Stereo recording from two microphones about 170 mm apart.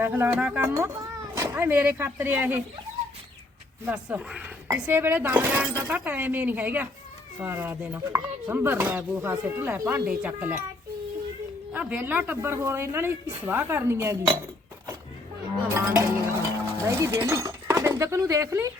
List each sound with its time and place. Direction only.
0.0 s speech: 15° right (ahead or behind)
3.8 s speech: 10° right (ahead or behind)
11.7 s speech: 10° right (ahead or behind)
15.7 s speech: 15° right (ahead or behind)